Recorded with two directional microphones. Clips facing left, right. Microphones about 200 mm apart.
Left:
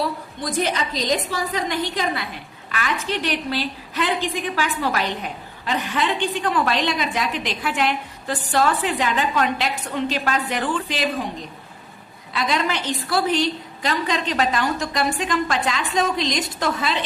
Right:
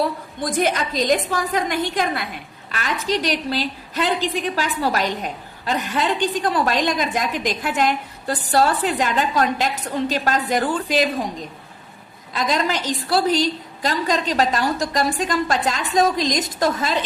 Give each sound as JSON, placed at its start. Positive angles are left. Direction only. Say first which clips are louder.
{"t": 0.6, "sound": "a woman's voice", "louder": "right 3 dB", "side_deg": -50}
{"t": 12.3, "sound": "a woman's voice", "louder": "right 1 dB", "side_deg": -40}